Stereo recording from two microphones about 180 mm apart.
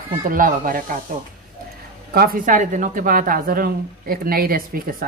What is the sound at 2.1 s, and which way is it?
Speech, 50° right (ahead or behind).